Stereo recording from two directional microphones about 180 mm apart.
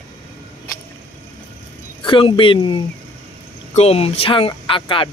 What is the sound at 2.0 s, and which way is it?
Speech, 30° left (ahead or behind).